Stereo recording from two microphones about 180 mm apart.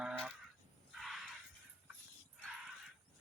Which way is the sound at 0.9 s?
Centre (ahead or behind).